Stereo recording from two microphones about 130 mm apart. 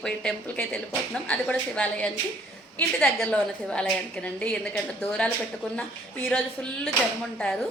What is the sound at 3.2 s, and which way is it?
A woman's voice, 10° left (ahead or behind).